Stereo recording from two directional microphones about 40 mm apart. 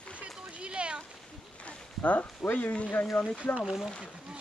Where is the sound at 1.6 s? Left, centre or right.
Left.